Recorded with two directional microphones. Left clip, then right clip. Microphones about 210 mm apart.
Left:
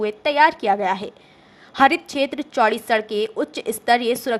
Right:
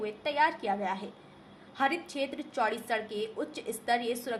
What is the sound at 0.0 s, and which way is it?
A woman's voice, 50° left (ahead or behind).